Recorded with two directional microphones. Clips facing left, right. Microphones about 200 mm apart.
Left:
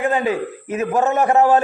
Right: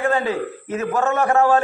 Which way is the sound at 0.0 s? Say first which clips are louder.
Left 1 dB; 20° left (ahead or behind).